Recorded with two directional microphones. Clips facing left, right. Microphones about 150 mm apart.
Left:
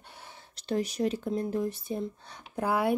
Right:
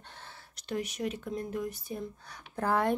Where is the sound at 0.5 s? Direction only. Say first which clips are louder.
Left 5 dB; 35° left (ahead or behind).